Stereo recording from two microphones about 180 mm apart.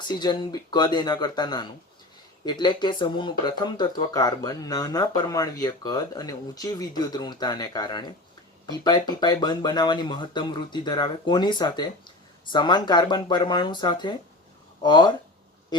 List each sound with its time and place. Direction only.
0.1 s speech: 25° left (ahead or behind)